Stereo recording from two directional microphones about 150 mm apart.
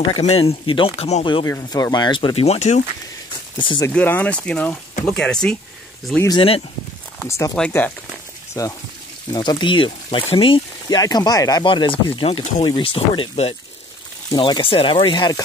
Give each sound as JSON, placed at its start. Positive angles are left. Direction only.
{"t": 0.2, "sound": "speech", "side_deg": 40}
{"t": 1.2, "sound": "speech", "side_deg": 30}
{"t": 3.5, "sound": "speech", "side_deg": 30}
{"t": 3.9, "sound": "speech", "side_deg": 10}
{"t": 6.2, "sound": "speech", "side_deg": 35}
{"t": 7.2, "sound": "speech", "side_deg": 20}
{"t": 7.5, "sound": "speech", "side_deg": 10}
{"t": 8.6, "sound": "speech", "side_deg": 20}